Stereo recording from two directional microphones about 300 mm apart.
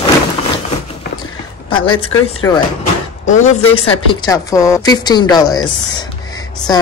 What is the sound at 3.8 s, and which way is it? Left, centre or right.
A woman's voice, centre.